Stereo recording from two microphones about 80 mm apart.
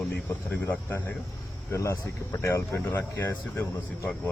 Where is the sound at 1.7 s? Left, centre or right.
Left.